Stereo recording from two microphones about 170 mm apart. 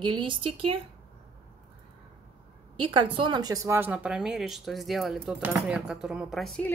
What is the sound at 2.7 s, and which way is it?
Speech, 30° right (ahead or behind).